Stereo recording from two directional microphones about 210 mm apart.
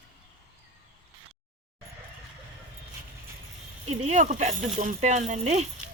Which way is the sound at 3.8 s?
30° right (ahead or behind).